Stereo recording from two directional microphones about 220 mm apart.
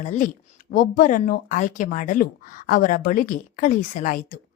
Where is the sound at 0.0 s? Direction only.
35° left (ahead or behind).